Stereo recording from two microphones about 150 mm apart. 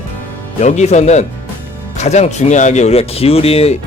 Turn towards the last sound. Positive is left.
turn(degrees=40)  # may be behind; listen again after turning